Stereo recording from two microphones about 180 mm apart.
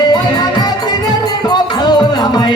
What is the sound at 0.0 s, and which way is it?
Music, 25° left (ahead or behind).